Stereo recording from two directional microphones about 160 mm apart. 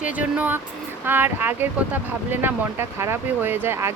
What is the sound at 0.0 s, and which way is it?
Speech, 10° right (ahead or behind).